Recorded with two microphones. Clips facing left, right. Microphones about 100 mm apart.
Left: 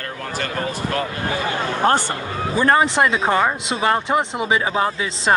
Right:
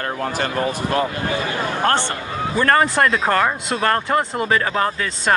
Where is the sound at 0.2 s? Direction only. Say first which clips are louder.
Right 3 dB; 30° right (ahead or behind).